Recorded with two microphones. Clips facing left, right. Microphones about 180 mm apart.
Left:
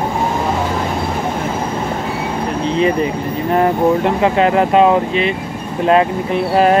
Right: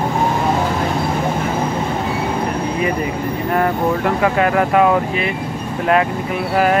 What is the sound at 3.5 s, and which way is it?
Speech, 25° left (ahead or behind).